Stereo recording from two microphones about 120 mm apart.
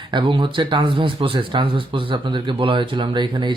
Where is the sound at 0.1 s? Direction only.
40° right (ahead or behind).